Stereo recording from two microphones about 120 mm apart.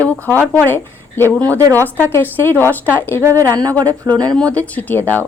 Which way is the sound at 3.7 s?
15° left (ahead or behind).